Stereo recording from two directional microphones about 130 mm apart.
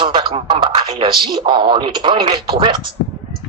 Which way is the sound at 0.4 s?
35° right (ahead or behind).